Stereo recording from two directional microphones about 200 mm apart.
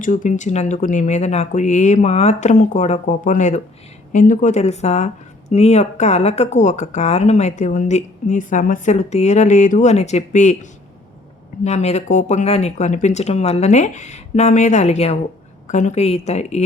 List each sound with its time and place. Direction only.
0.0 s speech: 40° left (ahead or behind)